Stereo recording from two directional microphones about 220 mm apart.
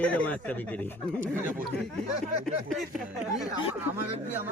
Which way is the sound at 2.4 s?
Centre (ahead or behind).